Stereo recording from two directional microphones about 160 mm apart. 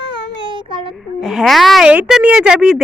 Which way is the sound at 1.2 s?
Centre (ahead or behind).